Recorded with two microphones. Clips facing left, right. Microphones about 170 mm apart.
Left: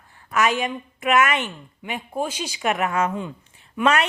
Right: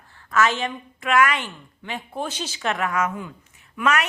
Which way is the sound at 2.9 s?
30° left (ahead or behind).